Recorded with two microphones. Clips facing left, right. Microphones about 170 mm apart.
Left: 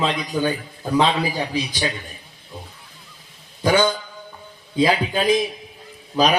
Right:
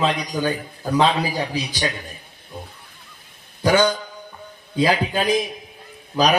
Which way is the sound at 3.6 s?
20° left (ahead or behind).